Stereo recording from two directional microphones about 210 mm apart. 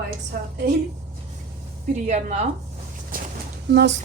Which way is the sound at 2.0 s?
35° right (ahead or behind).